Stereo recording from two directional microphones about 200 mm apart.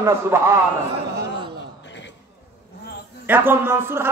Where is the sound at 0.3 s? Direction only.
15° right (ahead or behind).